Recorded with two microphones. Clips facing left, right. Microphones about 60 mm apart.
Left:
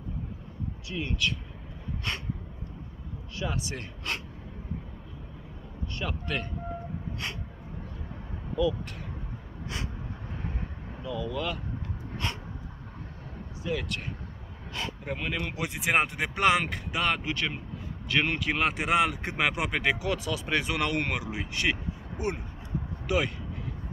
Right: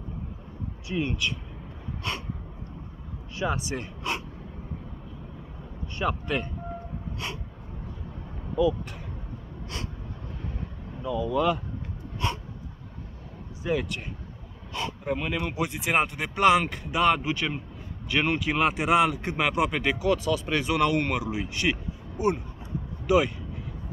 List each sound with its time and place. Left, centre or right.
0.8 s speech: right
2.0 s speech: centre
3.3 s speech: right
5.9 s speech: centre
11.0 s speech: centre
12.2 s a sound: centre
13.7 s speech: centre
14.7 s speech: centre